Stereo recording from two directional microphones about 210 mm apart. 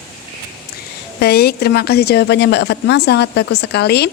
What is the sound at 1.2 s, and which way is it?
A woman's voice, 50° left (ahead or behind).